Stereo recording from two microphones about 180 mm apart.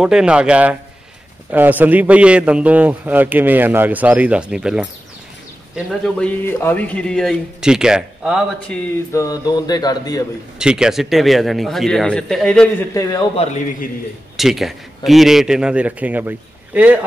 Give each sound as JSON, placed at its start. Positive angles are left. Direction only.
{"t": 0.0, "sound": "a man's voice", "side_deg": -5}
{"t": 5.9, "sound": "speech", "side_deg": 5}
{"t": 9.1, "sound": "speech", "side_deg": 20}
{"t": 10.6, "sound": "speech", "side_deg": -5}
{"t": 13.4, "sound": "a man's voice", "side_deg": 40}
{"t": 14.3, "sound": "a man's voice", "side_deg": 0}